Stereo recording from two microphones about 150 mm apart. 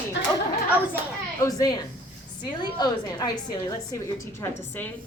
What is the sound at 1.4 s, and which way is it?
A woman's voice, 25° left (ahead or behind).